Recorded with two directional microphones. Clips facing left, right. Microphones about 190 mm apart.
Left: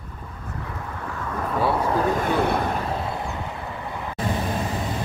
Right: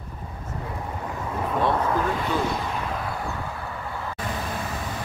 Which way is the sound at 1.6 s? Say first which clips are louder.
Left 1 dB; 5° left (ahead or behind).